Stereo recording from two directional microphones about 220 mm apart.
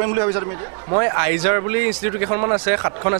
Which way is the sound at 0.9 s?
20° right (ahead or behind).